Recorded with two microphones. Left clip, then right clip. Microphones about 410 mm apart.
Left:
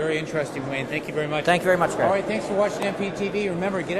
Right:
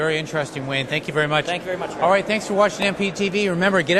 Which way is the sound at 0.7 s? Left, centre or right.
Right.